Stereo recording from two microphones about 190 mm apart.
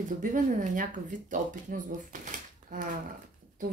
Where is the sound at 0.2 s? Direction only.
45° right (ahead or behind).